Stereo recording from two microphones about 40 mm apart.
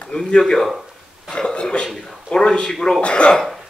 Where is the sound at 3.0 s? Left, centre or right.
Left.